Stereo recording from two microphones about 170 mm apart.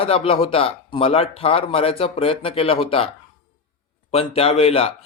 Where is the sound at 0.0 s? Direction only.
35° left (ahead or behind).